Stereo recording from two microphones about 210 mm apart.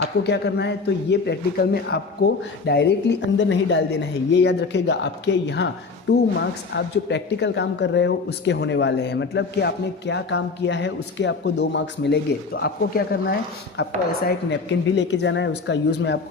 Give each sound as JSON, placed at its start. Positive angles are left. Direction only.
{"t": 0.3, "sound": "a man's voice", "side_deg": 55}